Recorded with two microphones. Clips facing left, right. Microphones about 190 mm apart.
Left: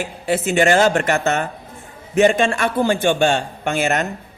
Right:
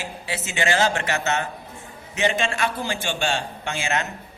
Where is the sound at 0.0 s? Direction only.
50° left (ahead or behind).